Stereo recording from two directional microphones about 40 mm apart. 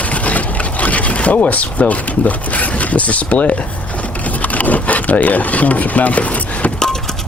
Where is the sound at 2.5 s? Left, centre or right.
Left.